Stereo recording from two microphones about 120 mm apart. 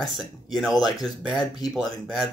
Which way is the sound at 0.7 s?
35° left (ahead or behind).